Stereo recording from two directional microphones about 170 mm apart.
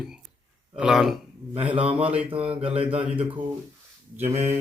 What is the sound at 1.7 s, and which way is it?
Mantra, 35° right (ahead or behind).